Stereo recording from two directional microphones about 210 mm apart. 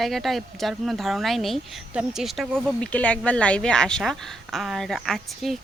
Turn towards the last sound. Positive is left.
turn(degrees=0)  # may be behind; listen again after turning